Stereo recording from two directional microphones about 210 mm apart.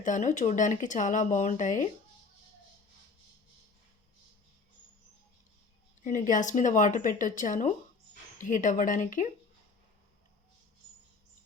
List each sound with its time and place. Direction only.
0.0 s speech: 35° left (ahead or behind)
6.1 s speech: 40° left (ahead or behind)